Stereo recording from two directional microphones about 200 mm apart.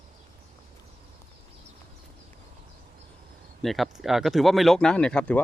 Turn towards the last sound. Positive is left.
turn(degrees=5)  # may be behind; listen again after turning